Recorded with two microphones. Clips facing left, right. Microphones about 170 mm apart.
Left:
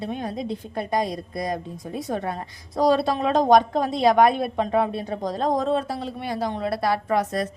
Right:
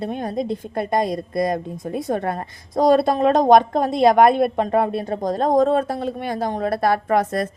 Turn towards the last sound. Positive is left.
turn(degrees=-55)  # may be behind; listen again after turning